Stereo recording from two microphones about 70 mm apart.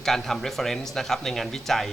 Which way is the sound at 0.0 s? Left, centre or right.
Centre.